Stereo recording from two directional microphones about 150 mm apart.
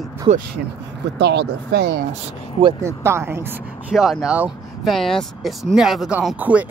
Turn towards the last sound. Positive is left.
turn(degrees=-10)  # may be behind; listen again after turning